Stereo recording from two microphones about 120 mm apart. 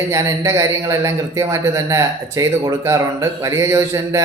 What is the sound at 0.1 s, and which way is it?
A man's voice, 25° right (ahead or behind).